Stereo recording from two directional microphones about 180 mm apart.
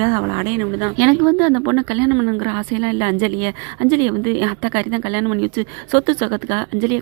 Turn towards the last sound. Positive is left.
turn(degrees=-25)  # may be behind; listen again after turning